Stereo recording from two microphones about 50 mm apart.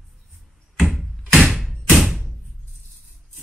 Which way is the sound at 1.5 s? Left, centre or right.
Centre.